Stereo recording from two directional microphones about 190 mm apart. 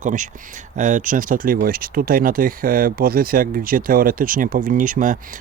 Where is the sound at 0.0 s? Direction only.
40° right (ahead or behind).